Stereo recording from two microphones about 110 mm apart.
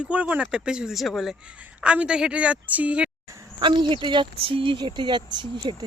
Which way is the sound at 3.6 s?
50° right (ahead or behind).